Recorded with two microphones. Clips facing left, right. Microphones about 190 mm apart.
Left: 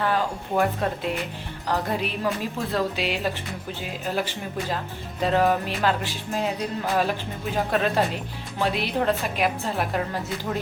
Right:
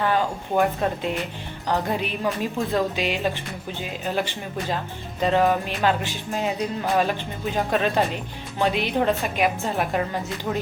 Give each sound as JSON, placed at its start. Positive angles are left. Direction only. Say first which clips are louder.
{"t": 0.0, "sound": "music", "louder": "right 2 dB", "side_deg": 0}